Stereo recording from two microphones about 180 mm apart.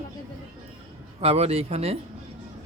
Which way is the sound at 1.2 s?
35° right (ahead or behind).